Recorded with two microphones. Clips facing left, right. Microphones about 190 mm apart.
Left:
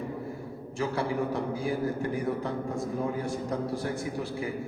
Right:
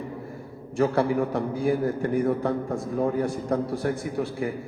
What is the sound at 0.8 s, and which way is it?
A man's voice, 60° right (ahead or behind).